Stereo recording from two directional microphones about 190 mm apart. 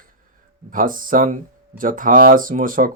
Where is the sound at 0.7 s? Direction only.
45° right (ahead or behind).